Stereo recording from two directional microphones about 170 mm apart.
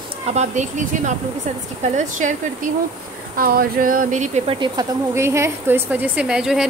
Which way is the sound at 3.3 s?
60° right (ahead or behind).